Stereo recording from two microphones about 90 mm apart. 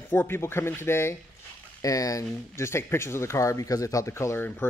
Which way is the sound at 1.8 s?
40° left (ahead or behind).